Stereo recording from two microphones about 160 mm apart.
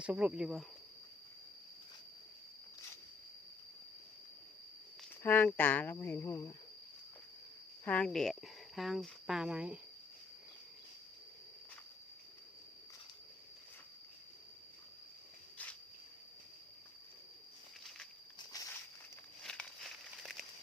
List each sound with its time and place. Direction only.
0.0 s speech: 10° right (ahead or behind)
5.2 s speech: 10° left (ahead or behind)
7.9 s speech: 5° left (ahead or behind)
17.8 s walk: centre (ahead or behind)
18.3 s walk: 20° left (ahead or behind)
19.4 s a sound: 5° left (ahead or behind)